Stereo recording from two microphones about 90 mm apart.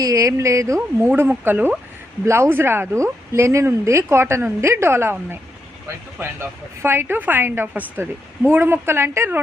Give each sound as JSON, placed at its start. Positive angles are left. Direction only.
{"t": 0.0, "sound": "speech", "side_deg": -40}
{"t": 6.1, "sound": "speech", "side_deg": -25}